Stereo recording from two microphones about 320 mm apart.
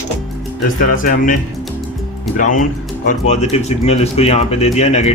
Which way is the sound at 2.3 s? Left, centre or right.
Left.